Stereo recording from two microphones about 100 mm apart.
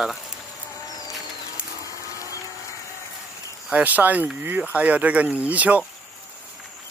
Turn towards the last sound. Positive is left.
turn(degrees=-15)  # may be behind; listen again after turning